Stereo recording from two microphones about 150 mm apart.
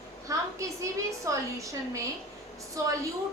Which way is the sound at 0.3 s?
20° right (ahead or behind).